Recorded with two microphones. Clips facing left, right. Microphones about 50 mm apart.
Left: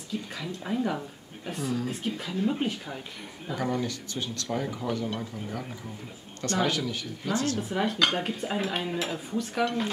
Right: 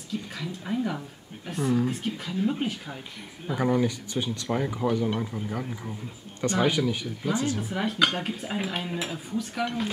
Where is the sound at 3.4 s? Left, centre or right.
Centre.